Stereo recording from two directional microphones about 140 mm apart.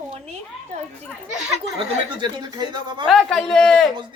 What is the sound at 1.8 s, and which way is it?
Speech, 35° right (ahead or behind).